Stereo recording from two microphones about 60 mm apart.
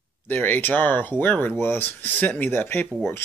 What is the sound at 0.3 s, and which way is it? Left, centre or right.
Speech, left.